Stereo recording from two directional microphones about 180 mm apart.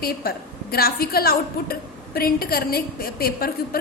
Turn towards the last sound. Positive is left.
turn(degrees=55)  # may be behind; listen again after turning